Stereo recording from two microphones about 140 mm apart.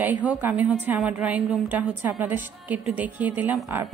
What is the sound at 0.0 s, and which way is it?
A woman's voice, 10° right (ahead or behind).